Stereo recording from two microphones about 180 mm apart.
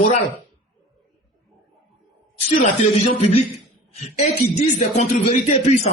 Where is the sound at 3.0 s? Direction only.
35° left (ahead or behind).